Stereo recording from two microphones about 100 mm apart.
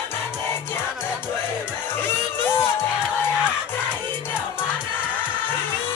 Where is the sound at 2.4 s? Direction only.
20° left (ahead or behind).